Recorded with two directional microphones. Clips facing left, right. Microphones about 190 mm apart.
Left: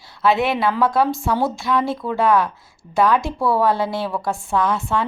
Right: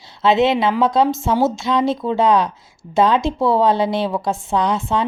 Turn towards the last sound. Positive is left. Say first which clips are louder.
# right 2 dB
turn(degrees=-20)  # may be behind; listen again after turning